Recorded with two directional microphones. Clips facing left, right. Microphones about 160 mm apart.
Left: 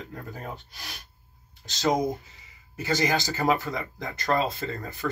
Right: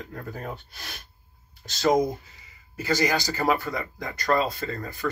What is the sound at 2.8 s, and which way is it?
Speech, 20° left (ahead or behind).